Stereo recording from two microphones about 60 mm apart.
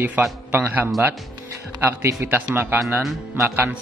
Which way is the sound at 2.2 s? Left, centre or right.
Right.